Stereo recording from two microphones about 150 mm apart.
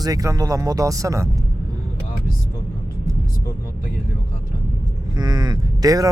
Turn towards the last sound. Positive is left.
turn(degrees=-25)  # may be behind; listen again after turning